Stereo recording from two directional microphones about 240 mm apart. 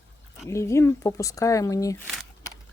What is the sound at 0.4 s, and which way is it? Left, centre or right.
Speech, centre.